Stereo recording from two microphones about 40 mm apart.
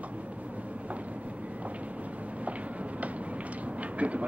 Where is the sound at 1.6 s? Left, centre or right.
Right.